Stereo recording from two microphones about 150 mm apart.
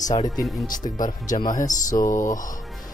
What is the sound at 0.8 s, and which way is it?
Speech, 50° left (ahead or behind).